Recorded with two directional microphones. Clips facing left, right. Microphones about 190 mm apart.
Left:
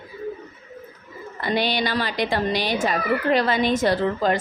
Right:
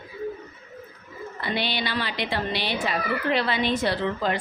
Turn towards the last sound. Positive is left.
turn(degrees=45)  # may be behind; listen again after turning